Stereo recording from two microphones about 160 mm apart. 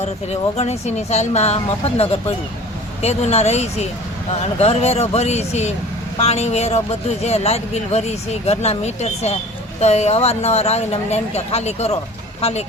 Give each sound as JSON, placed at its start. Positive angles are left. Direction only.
{"t": 0.0, "sound": "speech", "side_deg": 45}